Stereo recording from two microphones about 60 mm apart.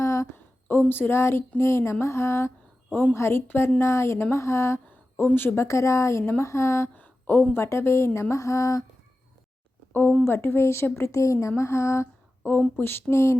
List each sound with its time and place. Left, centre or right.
0.0 s a sound: left
0.7 s speech: left
3.8 s speech: left
4.9 s a sound: left
5.5 s speech: left
6.9 s a sound: left
7.6 s speech: left
9.9 s speech: left
12.5 s speech: left
12.8 s speech: left